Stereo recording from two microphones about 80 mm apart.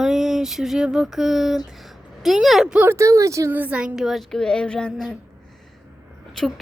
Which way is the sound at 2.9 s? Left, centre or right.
Right.